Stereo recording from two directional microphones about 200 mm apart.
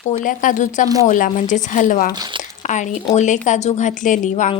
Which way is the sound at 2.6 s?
35° left (ahead or behind).